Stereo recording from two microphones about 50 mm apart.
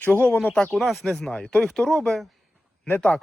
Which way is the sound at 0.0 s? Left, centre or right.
Left.